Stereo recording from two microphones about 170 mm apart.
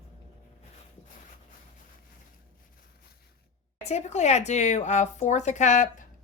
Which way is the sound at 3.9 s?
40° left (ahead or behind).